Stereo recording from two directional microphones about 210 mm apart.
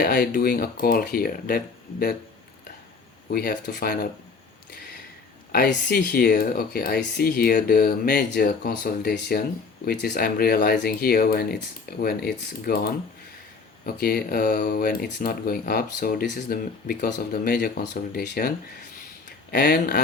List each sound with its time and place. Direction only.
0.0 s speech: 45° left (ahead or behind)
3.3 s speech: 45° left (ahead or behind)
5.5 s speech: 45° left (ahead or behind)